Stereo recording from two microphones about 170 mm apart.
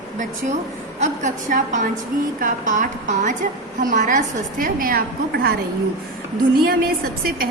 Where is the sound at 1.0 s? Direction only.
45° right (ahead or behind); by 5.6 s 65° right (ahead or behind).